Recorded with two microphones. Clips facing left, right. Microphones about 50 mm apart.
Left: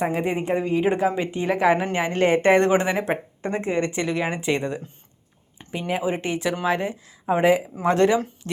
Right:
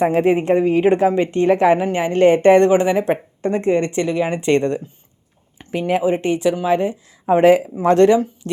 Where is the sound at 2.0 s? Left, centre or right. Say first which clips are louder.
Right 6 dB; left; by 4.8 s centre.